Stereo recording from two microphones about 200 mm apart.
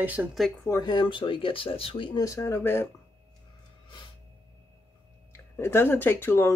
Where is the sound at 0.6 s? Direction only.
20° left (ahead or behind).